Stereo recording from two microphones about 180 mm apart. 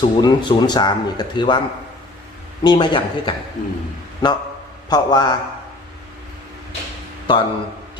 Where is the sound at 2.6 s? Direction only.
25° left (ahead or behind).